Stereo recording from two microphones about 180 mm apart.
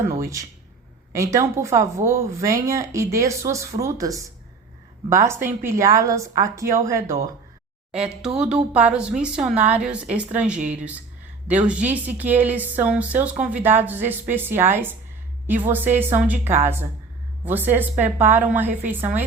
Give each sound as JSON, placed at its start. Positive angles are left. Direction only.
{"t": 0.2, "sound": "speech", "side_deg": -15}
{"t": 8.7, "sound": "speech", "side_deg": -5}